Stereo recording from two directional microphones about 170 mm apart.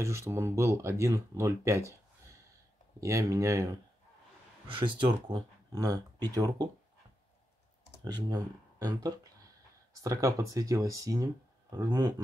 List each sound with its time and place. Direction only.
0.0 s speech: 15° right (ahead or behind)
4.6 s speech: 30° right (ahead or behind)
8.0 s speech: 25° right (ahead or behind)